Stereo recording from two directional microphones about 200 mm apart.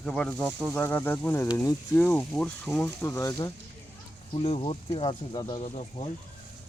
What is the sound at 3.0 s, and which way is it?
Speech, 15° left (ahead or behind).